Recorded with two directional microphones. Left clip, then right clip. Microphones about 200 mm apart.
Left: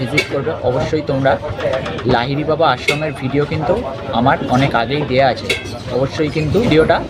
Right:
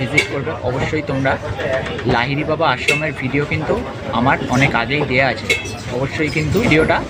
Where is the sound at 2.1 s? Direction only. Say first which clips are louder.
Left 2 dB; 20° left (ahead or behind).